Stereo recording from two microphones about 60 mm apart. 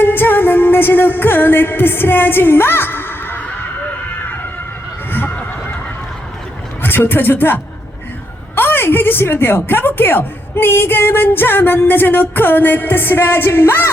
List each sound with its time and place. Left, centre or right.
0.0 s music: left
5.1 s a sound: left
6.8 s a woman's voice: left